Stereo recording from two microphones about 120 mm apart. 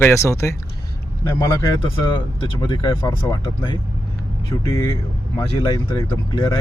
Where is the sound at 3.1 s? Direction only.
30° left (ahead or behind).